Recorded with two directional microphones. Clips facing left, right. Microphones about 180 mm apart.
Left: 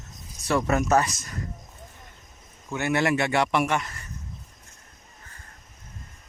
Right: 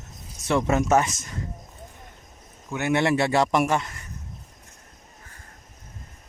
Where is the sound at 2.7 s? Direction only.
20° right (ahead or behind); by 3.8 s 40° right (ahead or behind).